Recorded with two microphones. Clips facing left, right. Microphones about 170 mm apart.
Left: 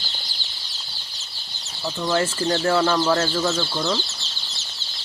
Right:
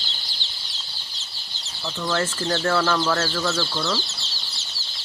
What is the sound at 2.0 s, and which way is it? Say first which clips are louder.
Speech: left 3 dB; 15° left (ahead or behind).